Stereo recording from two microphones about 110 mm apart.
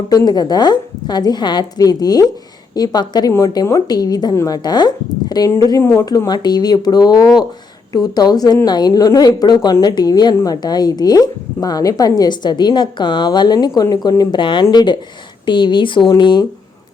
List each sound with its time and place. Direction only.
0.1 s speech: 35° left (ahead or behind)